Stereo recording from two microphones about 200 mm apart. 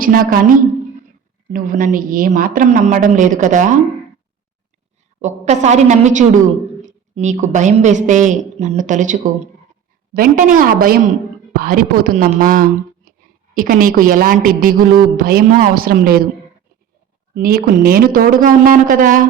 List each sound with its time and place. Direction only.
0.0 s a woman's voice: 45° right (ahead or behind)
1.5 s a woman's voice: 40° right (ahead or behind)
5.2 s a woman's voice: 35° right (ahead or behind)
17.3 s a woman's voice: 45° right (ahead or behind)